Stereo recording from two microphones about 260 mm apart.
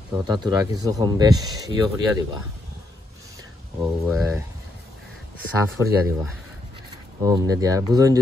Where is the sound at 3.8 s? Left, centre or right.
Centre.